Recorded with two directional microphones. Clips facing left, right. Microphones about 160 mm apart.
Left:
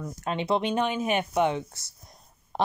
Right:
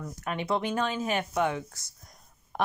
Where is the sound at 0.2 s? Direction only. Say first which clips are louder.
Left 3 dB; 25° left (ahead or behind).